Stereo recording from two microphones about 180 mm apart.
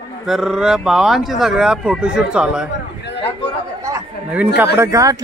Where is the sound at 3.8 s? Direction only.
15° right (ahead or behind).